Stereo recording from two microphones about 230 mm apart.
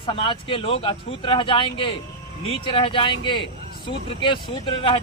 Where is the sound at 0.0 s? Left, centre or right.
Left.